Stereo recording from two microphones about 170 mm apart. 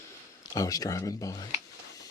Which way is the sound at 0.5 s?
20° left (ahead or behind).